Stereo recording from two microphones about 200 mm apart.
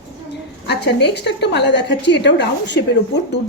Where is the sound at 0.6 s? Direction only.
55° left (ahead or behind).